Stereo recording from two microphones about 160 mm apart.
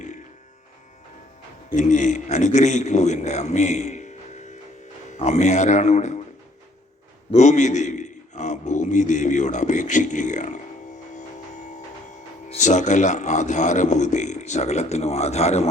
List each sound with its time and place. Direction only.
1.7 s a man's voice: 50° left (ahead or behind)
7.3 s a man's voice: 45° left (ahead or behind)